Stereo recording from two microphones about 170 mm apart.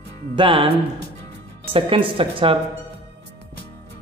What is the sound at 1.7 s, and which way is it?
Speech, 30° right (ahead or behind).